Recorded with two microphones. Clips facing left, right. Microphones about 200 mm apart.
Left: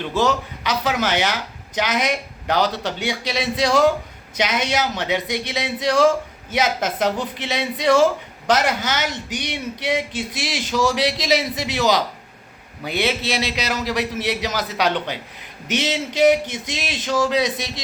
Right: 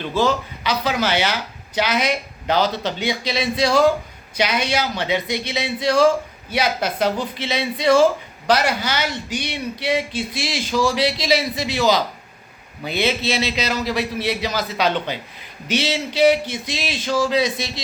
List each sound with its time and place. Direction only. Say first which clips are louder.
0.2 s speech: right 1 dB; 15° left (ahead or behind)